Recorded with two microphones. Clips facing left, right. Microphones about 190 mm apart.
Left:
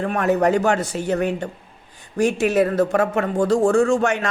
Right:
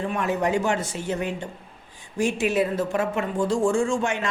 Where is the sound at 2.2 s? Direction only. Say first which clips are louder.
Left 5 dB; 40° left (ahead or behind).